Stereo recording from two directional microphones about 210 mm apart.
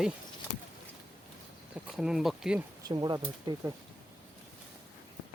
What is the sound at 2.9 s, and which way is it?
Speech, 20° right (ahead or behind).